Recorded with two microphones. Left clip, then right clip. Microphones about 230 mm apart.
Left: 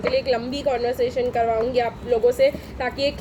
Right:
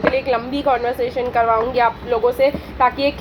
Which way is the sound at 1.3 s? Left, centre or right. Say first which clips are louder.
Right 4 dB; right.